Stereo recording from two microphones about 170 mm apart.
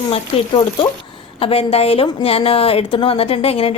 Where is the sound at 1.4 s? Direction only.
35° left (ahead or behind).